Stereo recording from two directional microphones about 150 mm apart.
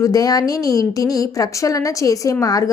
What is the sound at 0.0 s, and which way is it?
A woman's voice, 25° left (ahead or behind).